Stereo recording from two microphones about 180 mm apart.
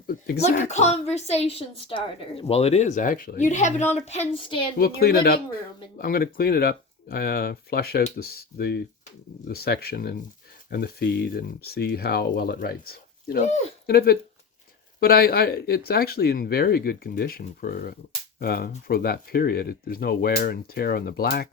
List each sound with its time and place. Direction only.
0.5 s a woman's voice: 40° left (ahead or behind)
4.8 s speech: 55° left (ahead or behind)